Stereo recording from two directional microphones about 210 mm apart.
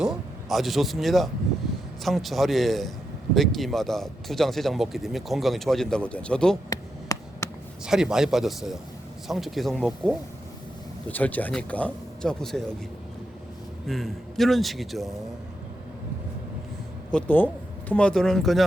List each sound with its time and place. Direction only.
0.0 s speech: centre (ahead or behind)
6.7 s a sound: 15° left (ahead or behind)
7.9 s speech: 5° right (ahead or behind)
13.8 s speech: centre (ahead or behind)
17.1 s speech: 5° left (ahead or behind)